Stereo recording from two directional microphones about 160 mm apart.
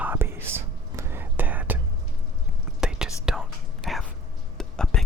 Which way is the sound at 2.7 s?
5° right (ahead or behind).